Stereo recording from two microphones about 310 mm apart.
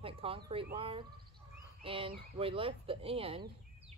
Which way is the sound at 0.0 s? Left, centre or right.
Centre.